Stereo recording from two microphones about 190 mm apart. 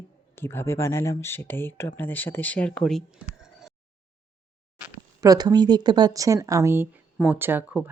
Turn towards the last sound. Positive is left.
turn(degrees=-10)  # may be behind; listen again after turning